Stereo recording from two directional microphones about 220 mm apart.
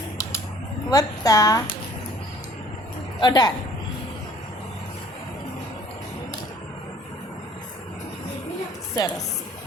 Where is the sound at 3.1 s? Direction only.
20° left (ahead or behind).